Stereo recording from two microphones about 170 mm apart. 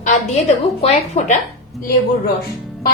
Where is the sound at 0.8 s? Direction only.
45° left (ahead or behind).